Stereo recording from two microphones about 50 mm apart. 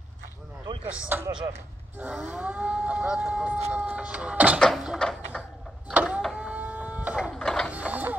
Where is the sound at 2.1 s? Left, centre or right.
Right.